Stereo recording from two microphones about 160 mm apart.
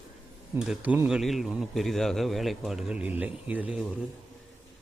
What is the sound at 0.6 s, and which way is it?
A man's voice, 5° right (ahead or behind).